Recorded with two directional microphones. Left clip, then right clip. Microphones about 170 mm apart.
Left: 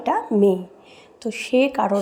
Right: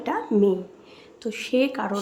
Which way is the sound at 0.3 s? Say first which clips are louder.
Even; 10° left (ahead or behind).